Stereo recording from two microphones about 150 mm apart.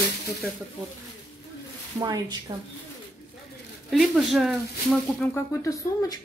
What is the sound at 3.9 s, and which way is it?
Speech, centre (ahead or behind).